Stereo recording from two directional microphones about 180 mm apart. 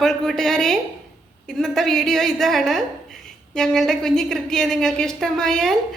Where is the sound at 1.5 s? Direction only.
Centre (ahead or behind).